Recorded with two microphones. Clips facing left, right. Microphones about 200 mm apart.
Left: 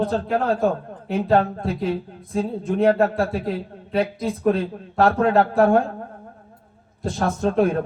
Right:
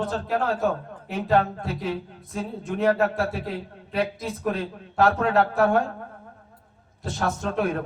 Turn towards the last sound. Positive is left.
turn(degrees=35)  # may be behind; listen again after turning